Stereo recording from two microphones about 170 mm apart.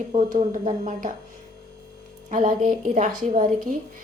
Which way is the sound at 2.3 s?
50° right (ahead or behind).